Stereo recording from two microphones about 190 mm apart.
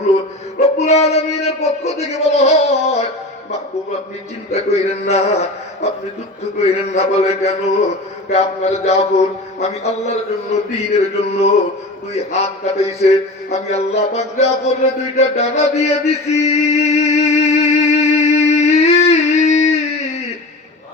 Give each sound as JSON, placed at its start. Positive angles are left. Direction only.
{"t": 0.6, "sound": "speech", "side_deg": 35}
{"t": 4.5, "sound": "speech", "side_deg": 35}
{"t": 6.9, "sound": "speech", "side_deg": 35}
{"t": 15.1, "sound": "mantra", "side_deg": 35}